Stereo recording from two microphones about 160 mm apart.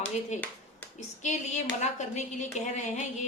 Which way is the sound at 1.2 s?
50° left (ahead or behind).